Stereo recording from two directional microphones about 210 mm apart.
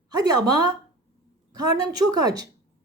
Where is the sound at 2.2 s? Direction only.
20° right (ahead or behind).